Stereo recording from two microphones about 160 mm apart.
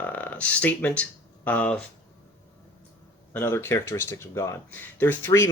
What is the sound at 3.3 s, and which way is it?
Speech, 15° left (ahead or behind).